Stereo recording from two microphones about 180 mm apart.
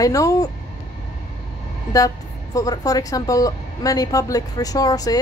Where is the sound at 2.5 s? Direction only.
20° left (ahead or behind).